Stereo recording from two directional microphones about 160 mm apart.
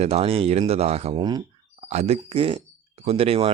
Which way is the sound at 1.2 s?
25° right (ahead or behind).